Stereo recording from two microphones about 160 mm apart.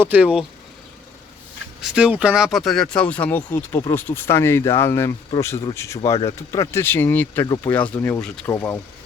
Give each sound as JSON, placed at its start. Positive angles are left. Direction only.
{"t": 0.0, "sound": "speech", "side_deg": -10}
{"t": 1.8, "sound": "speech", "side_deg": -5}